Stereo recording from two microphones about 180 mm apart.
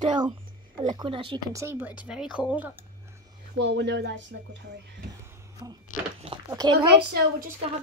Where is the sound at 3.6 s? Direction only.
75° right (ahead or behind).